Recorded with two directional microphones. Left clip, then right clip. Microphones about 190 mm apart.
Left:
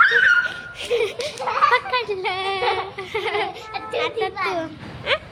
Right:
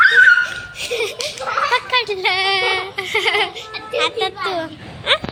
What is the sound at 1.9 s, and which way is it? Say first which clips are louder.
A child's voice: right 6 dB; centre (ahead or behind).